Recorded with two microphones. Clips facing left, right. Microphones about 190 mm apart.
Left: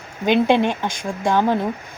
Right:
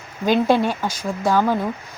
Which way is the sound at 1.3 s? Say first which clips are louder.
Left 1 dB; 20° left (ahead or behind).